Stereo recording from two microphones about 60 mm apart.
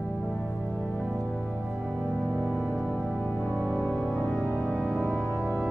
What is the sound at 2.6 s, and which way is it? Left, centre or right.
Music, left.